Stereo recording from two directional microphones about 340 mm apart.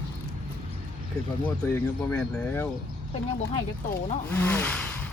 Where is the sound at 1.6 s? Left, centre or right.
Centre.